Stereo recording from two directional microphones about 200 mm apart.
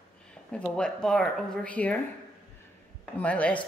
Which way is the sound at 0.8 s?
5° left (ahead or behind).